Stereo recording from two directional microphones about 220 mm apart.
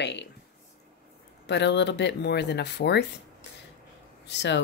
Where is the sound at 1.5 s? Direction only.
50° left (ahead or behind).